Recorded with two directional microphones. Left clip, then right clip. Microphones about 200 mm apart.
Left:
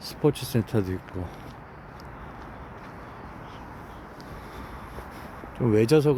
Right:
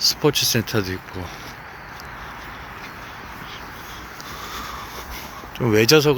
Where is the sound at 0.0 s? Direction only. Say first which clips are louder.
Right 8 dB; 10° left (ahead or behind).